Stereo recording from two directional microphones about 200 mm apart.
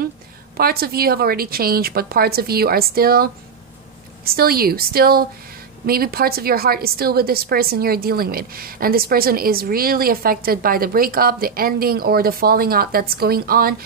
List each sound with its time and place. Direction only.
0.6 s a woman's voice: 50° right (ahead or behind)